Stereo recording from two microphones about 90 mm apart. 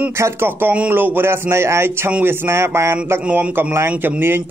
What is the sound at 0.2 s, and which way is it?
A man's voice, 25° right (ahead or behind).